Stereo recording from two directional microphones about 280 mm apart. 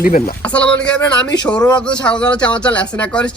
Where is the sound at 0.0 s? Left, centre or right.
Left.